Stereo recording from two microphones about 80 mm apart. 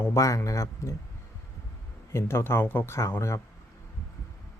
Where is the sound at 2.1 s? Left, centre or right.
Left.